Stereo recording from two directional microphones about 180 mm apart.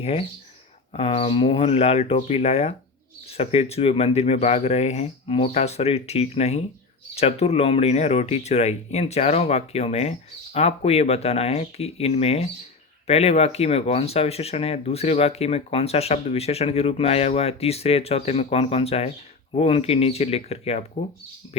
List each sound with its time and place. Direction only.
0.0 s speech: 35° left (ahead or behind)